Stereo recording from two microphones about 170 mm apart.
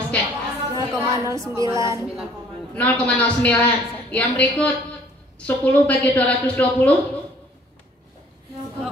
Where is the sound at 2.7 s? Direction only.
10° left (ahead or behind).